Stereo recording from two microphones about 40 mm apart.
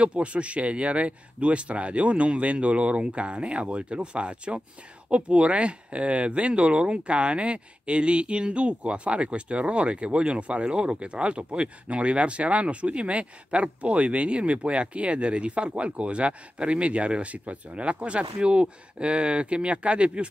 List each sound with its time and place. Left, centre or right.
0.0 s speech: right